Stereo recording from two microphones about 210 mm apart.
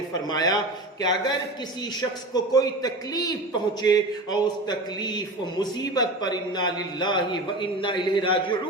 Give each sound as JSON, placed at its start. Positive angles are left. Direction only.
{"t": 0.3, "sound": "a man's voice", "side_deg": 20}